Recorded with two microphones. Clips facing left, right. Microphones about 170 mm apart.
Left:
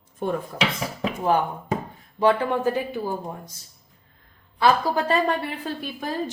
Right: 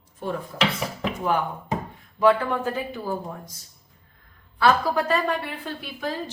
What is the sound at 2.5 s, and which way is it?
A woman's voice, 15° left (ahead or behind).